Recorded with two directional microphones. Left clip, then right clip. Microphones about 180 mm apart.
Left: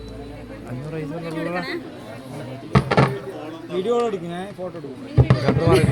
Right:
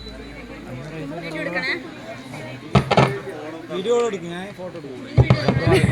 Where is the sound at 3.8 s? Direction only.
70° left (ahead or behind).